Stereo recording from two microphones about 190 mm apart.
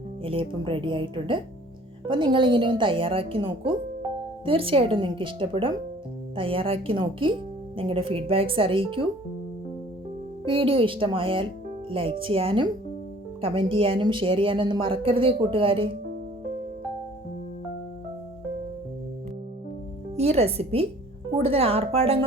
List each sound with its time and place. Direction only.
0.2 s speech: 30° right (ahead or behind)
10.4 s speech: 30° right (ahead or behind)
20.1 s a woman's voice: 35° right (ahead or behind)